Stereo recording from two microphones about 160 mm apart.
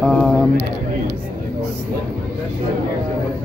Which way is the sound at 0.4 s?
20° left (ahead or behind).